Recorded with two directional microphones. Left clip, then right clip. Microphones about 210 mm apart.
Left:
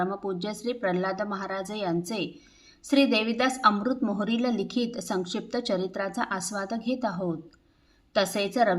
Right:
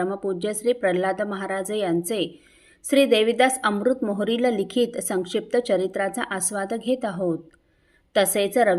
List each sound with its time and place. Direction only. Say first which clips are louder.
0.0 s a woman's voice: right 4 dB; 15° right (ahead or behind)